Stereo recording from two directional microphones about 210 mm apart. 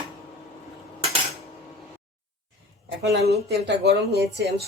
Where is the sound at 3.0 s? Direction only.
50° right (ahead or behind).